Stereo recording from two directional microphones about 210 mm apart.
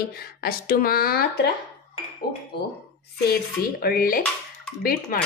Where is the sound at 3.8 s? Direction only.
45° left (ahead or behind).